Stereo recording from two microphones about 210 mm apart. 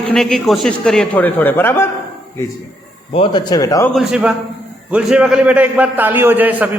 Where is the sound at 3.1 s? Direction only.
20° left (ahead or behind).